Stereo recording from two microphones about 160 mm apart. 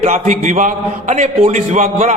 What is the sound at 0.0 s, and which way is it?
A man's voice, 50° right (ahead or behind).